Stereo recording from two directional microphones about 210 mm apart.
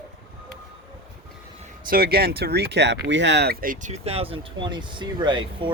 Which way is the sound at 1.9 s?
45° right (ahead or behind).